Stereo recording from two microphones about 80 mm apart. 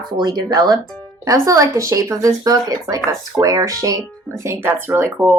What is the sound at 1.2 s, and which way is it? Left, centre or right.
A woman's voice, right.